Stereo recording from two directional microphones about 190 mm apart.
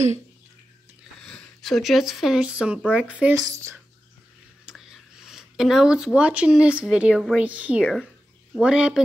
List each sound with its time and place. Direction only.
1.2 s speech: 5° left (ahead or behind); by 3.8 s 15° right (ahead or behind)
4.6 s speech: centre (ahead or behind)